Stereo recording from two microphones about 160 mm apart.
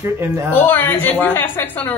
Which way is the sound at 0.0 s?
15° right (ahead or behind).